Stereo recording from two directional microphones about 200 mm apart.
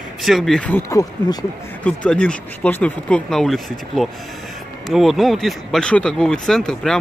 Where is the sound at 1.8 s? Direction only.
5° left (ahead or behind).